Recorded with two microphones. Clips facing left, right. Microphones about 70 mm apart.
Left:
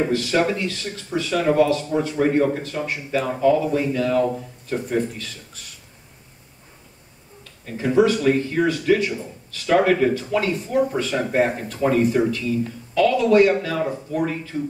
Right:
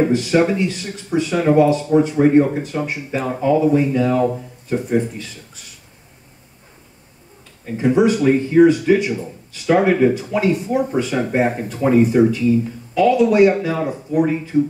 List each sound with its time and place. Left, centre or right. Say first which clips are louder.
0.1 s speech: right 4 dB; centre
7.6 s speech: right 2 dB; centre